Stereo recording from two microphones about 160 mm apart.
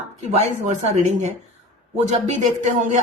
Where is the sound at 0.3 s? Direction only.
50° right (ahead or behind).